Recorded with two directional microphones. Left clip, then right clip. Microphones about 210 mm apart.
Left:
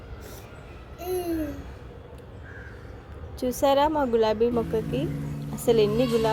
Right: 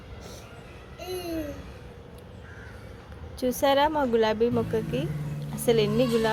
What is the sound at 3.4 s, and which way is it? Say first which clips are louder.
A woman's voice: left 1 dB; centre (ahead or behind).